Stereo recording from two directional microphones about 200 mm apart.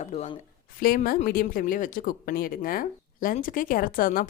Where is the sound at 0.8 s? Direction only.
45° left (ahead or behind).